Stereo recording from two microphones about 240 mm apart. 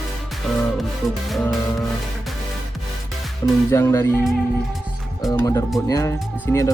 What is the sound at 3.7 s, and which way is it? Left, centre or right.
Speech, centre.